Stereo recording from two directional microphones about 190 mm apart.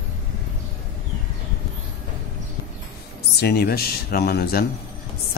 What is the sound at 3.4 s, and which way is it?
Speech, 55° left (ahead or behind).